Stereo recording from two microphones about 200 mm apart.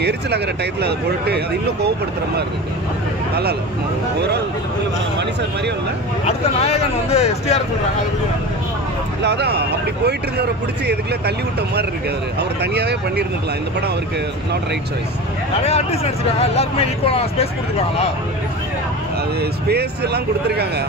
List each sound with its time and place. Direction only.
0.8 s speech: 55° right (ahead or behind)
6.2 s speech: 30° left (ahead or behind)
9.2 s speech: 55° right (ahead or behind)
10.9 s speech: 55° right (ahead or behind)
15.6 s speech: 30° left (ahead or behind)
19.7 s speech: 55° right (ahead or behind)